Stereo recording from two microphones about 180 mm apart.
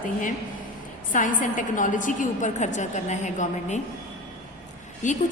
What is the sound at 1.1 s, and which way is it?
A woman's voice, 45° left (ahead or behind).